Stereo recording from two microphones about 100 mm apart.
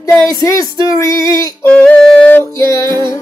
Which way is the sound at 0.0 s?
30° left (ahead or behind).